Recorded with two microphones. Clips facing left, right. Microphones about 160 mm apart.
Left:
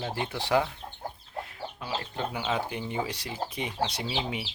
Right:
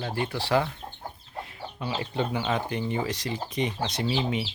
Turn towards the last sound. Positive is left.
turn(degrees=10)  # may be behind; listen again after turning